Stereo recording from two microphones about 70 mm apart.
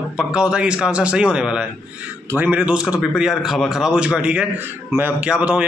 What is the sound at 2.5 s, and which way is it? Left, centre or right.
Speech, centre.